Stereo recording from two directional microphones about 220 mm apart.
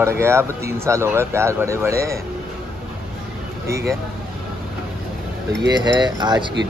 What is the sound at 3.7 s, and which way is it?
Speech, 15° right (ahead or behind).